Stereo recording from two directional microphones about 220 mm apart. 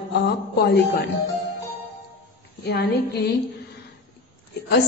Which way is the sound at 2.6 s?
45° left (ahead or behind).